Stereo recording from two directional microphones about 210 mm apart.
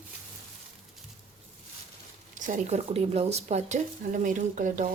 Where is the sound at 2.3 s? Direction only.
35° right (ahead or behind).